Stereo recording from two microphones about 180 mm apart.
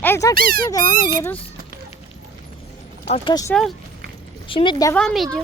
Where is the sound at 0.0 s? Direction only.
15° left (ahead or behind).